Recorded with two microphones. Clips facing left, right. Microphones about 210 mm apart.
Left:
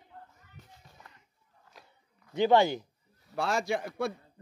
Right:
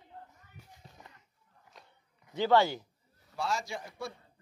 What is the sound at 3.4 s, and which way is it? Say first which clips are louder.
Speech: left 5 dB; 60° left (ahead or behind).